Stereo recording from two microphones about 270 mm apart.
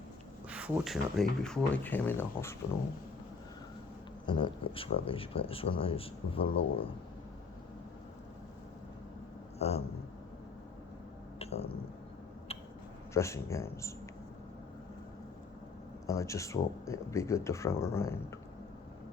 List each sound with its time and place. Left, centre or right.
0.5 s speech: centre
4.3 s speech: centre
9.6 s a sound: left
11.3 s a sound: left
13.1 s speech: centre
16.0 s speech: centre